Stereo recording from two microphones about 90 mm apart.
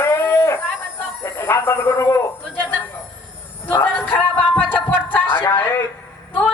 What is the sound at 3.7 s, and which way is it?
Music, 20° left (ahead or behind).